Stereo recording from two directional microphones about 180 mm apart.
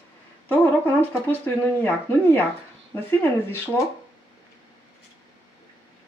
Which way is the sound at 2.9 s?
10° left (ahead or behind).